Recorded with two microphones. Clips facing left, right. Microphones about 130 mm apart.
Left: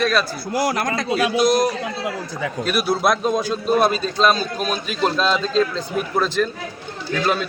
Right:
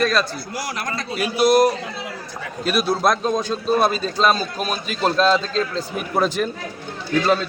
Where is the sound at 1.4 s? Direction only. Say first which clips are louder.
Right 3 dB; 5° right (ahead or behind).